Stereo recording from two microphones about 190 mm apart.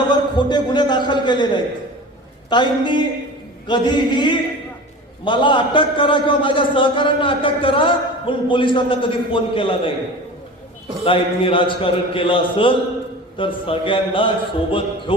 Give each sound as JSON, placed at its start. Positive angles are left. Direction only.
{"t": 0.1, "sound": "a man's voice", "side_deg": 25}
{"t": 2.5, "sound": "a man's voice", "side_deg": 25}
{"t": 11.0, "sound": "a man's voice", "side_deg": 30}